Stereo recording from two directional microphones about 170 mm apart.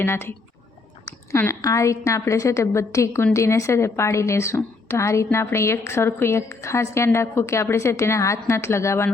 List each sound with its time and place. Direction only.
0.0 s a woman's voice: 15° left (ahead or behind)